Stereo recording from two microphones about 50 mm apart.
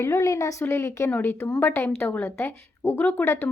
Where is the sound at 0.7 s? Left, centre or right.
Left.